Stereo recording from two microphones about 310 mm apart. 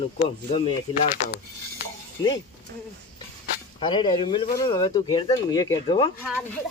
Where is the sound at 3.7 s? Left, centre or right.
Centre.